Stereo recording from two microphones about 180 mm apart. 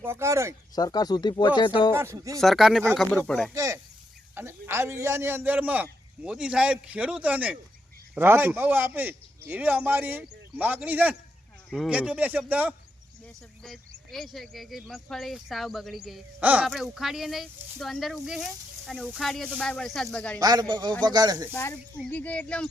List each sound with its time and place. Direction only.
0.0 s a man's voice: 15° right (ahead or behind)
0.8 s speech: 20° left (ahead or behind)
1.9 s a man's voice: 15° right (ahead or behind)
2.4 s speech: centre (ahead or behind)
3.5 s a sound: 20° right (ahead or behind)
4.4 s a man's voice: 15° right (ahead or behind)
13.2 s speech: 5° left (ahead or behind)
20.4 s speech: 20° right (ahead or behind)
21.5 s speech: 10° left (ahead or behind)